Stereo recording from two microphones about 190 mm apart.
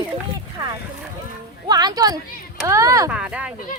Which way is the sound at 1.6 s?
20° right (ahead or behind).